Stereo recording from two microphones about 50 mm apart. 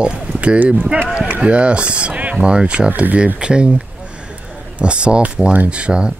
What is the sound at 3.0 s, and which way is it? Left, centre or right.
Speech, right.